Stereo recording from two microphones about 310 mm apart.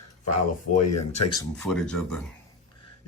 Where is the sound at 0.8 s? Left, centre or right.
Left.